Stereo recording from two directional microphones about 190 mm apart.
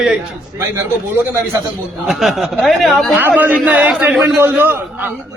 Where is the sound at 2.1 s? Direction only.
Centre (ahead or behind).